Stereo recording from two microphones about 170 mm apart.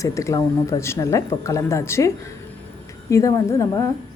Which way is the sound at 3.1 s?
20° left (ahead or behind).